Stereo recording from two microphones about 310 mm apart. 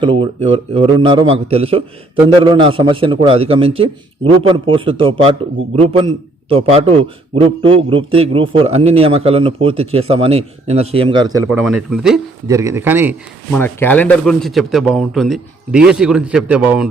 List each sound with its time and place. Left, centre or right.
0.0 s a man's voice: centre
11.4 s a man's voice: centre
13.5 s a man's voice: centre